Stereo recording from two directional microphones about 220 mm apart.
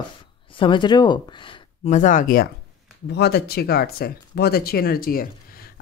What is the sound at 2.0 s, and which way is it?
Speech, 35° left (ahead or behind).